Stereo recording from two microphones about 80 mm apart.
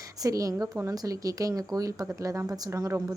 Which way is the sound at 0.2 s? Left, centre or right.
Right.